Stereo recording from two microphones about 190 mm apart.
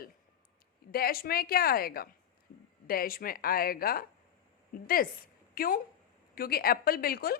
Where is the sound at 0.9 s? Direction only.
50° left (ahead or behind).